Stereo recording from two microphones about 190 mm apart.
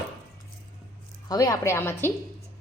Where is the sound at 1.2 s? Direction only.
20° left (ahead or behind).